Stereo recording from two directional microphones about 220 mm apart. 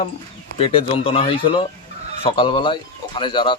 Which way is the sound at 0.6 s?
25° left (ahead or behind).